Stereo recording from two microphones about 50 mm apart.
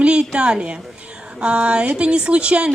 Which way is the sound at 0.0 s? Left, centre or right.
Right.